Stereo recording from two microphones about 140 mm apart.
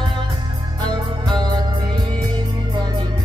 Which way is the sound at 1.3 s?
30° right (ahead or behind).